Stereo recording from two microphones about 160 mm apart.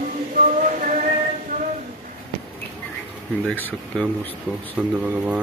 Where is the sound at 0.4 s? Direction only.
55° right (ahead or behind).